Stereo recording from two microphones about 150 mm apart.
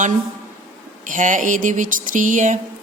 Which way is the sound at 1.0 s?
60° right (ahead or behind).